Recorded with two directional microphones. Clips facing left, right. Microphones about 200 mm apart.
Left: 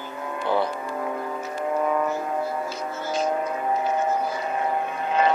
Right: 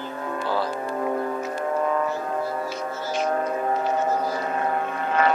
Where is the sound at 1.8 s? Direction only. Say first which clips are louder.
Left 1 dB; 10° left (ahead or behind).